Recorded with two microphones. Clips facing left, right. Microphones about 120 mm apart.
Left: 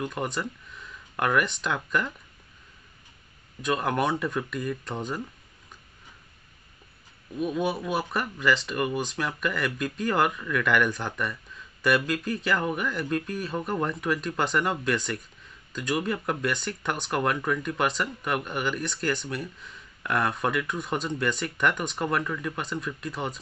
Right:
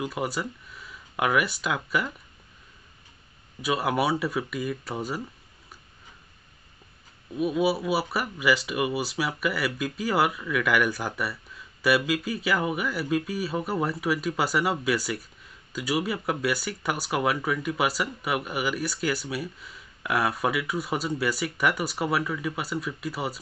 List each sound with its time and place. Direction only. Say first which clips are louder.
0.0 s speech: right 1 dB; 5° right (ahead or behind)
3.6 s speech: right 1 dB; 5° right (ahead or behind)
7.3 s speech: right 3 dB; 5° right (ahead or behind)